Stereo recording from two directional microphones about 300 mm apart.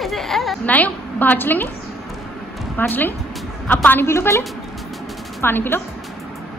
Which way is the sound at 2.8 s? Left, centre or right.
Centre.